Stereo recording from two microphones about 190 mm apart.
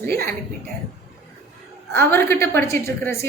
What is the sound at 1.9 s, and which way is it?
A woman's voice, 10° left (ahead or behind).